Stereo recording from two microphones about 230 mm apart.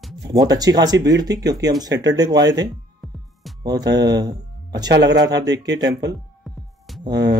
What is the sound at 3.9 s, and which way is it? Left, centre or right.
Speech, centre.